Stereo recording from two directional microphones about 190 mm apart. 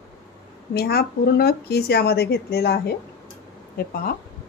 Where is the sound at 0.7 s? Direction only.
55° left (ahead or behind).